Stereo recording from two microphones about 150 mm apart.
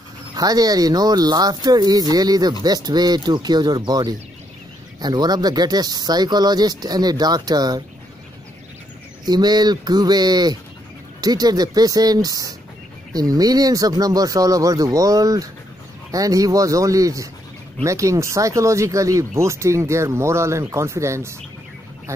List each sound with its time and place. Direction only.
0.4 s speech: 25° right (ahead or behind)
9.2 s speech: 30° right (ahead or behind)